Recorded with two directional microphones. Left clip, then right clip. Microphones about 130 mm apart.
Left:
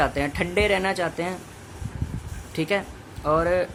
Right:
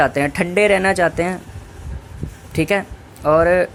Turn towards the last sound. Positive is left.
turn(degrees=-40)  # may be behind; listen again after turning